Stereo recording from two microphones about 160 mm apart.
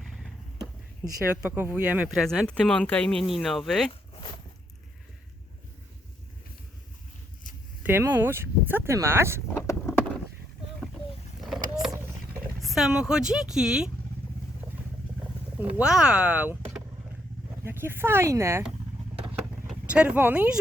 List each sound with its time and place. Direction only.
0.0 s a sound: centre (ahead or behind)
1.0 s speech: 15° right (ahead or behind)
2.5 s speech: 5° left (ahead or behind)
7.9 s speech: 15° right (ahead or behind)
9.6 s a sound: 15° left (ahead or behind)
11.3 s vehicle: centre (ahead or behind)
12.6 s speech: centre (ahead or behind)
15.5 s speech: 5° right (ahead or behind)
17.6 s speech: 15° right (ahead or behind)
19.3 s vehicle: 5° right (ahead or behind)